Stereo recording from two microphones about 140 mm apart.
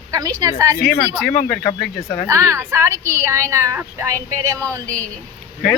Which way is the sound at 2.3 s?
20° right (ahead or behind).